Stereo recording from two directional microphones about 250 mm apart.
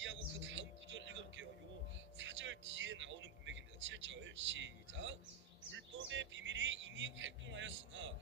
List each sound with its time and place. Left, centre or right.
0.0 s music: right
2.1 s vehicle: right
5.7 s a sound: right